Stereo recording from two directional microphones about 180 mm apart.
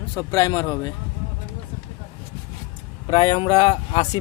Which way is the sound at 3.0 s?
25° left (ahead or behind).